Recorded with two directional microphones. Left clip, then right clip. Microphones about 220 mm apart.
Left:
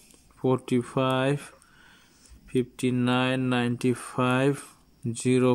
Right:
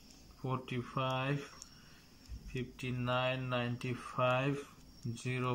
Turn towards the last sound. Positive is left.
turn(degrees=45)  # may be behind; listen again after turning